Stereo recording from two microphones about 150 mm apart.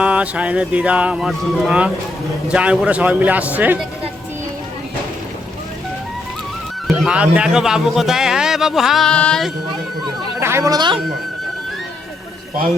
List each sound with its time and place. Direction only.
0.0 s speech: 10° right (ahead or behind)
6.8 s speech: 5° right (ahead or behind)
10.4 s speech: 20° right (ahead or behind)